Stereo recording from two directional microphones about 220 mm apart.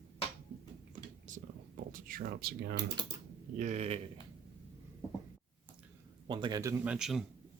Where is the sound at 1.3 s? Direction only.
40° right (ahead or behind).